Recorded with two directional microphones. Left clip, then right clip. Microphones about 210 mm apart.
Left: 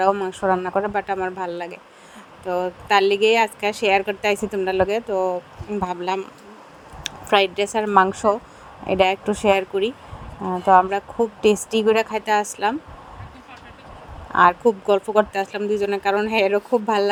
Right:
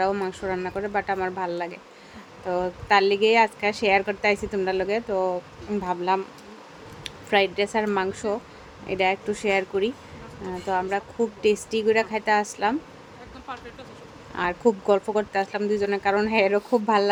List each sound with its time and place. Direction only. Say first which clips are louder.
0.0 s a woman's voice: left 6 dB; 15° left (ahead or behind)
14.3 s speech: left 8 dB; 20° left (ahead or behind)